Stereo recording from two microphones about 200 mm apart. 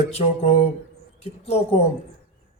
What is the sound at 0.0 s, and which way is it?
Speech, 30° left (ahead or behind).